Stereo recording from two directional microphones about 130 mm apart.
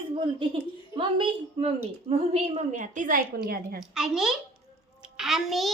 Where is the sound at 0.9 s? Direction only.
40° right (ahead or behind); by 3.2 s 80° right.